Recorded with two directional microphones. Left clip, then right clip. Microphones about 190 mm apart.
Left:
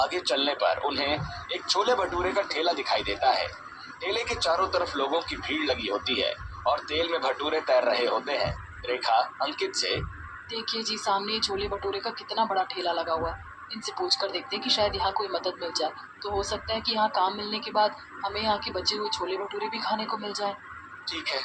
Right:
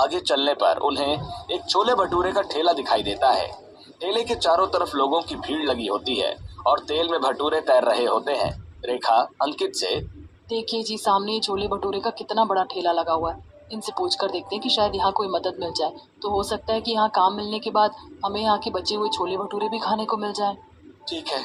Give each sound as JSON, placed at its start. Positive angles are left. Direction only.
{"t": 0.0, "sound": "speech", "side_deg": -50}